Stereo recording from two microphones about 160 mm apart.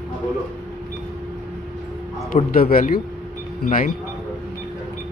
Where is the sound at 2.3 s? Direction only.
65° left (ahead or behind).